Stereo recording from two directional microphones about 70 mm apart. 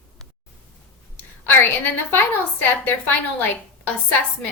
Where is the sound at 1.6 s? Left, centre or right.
Left.